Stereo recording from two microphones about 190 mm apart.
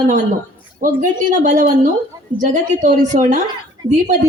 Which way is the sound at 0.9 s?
45° right (ahead or behind).